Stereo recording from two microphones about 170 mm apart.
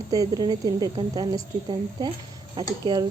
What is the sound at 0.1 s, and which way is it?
A woman's voice, 20° right (ahead or behind).